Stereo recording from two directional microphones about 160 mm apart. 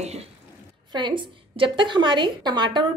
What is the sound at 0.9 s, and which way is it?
A woman's voice, 30° right (ahead or behind).